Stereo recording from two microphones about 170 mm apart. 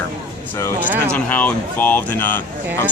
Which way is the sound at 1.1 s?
10° left (ahead or behind).